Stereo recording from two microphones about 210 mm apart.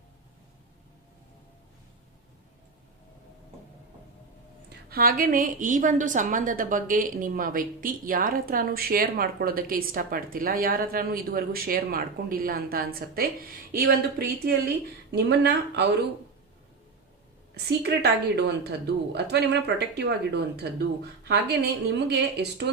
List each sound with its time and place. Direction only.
4.9 s a woman's voice: 45° right (ahead or behind)
15.1 s a woman's voice: 50° right (ahead or behind)
17.5 s a woman's voice: 50° right (ahead or behind)